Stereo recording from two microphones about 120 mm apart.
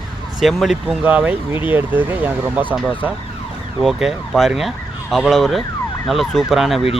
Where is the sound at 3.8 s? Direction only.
Centre (ahead or behind).